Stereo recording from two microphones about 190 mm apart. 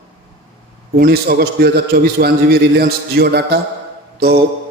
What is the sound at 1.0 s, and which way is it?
A man's voice, 55° right (ahead or behind).